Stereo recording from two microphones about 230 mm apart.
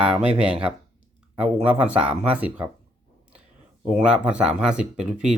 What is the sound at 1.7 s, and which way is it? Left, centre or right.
Speech, centre.